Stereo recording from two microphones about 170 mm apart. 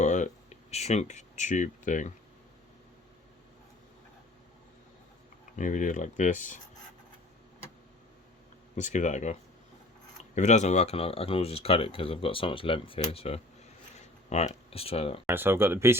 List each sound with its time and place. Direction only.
0.0 s a sound: 45° left (ahead or behind)
5.5 s speech: 50° left (ahead or behind)
8.7 s speech: 45° left (ahead or behind)
15.3 s speech: 15° right (ahead or behind)